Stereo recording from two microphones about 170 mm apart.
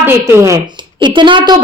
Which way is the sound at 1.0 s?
30° right (ahead or behind).